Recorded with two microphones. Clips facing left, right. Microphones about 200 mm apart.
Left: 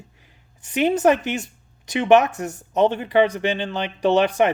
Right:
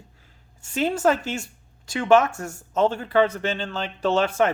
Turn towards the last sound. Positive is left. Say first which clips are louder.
# left 3 dB
turn(degrees=15)  # may be behind; listen again after turning